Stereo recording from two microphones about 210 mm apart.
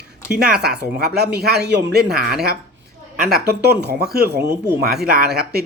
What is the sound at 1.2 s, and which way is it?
Speech, 50° right (ahead or behind).